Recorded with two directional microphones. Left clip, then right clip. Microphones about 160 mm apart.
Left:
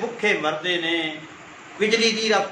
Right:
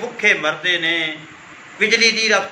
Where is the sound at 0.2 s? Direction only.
20° left (ahead or behind).